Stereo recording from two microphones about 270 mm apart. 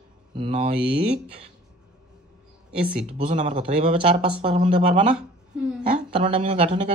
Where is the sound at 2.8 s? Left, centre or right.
Centre.